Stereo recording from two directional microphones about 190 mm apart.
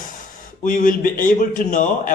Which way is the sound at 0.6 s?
45° left (ahead or behind).